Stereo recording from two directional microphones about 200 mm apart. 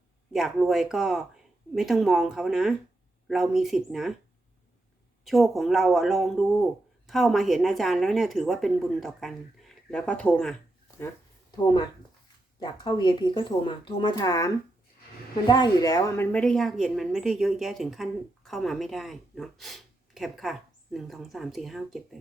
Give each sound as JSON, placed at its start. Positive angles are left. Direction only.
{"t": 0.3, "sound": "a woman's voice", "side_deg": 0}
{"t": 5.2, "sound": "a woman's voice", "side_deg": 0}
{"t": 11.5, "sound": "a woman's voice", "side_deg": 20}